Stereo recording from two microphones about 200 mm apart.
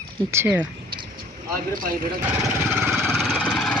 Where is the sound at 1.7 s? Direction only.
45° right (ahead or behind).